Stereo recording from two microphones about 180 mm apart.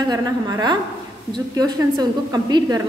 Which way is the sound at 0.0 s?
20° right (ahead or behind).